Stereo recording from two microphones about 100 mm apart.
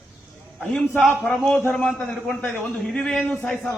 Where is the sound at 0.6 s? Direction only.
15° left (ahead or behind).